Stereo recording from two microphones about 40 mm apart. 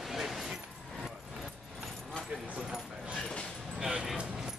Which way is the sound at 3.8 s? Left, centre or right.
Centre.